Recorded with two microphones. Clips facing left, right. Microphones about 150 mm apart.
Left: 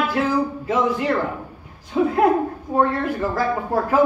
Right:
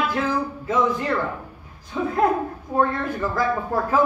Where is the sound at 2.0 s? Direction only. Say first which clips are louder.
Left 6 dB; 30° left (ahead or behind).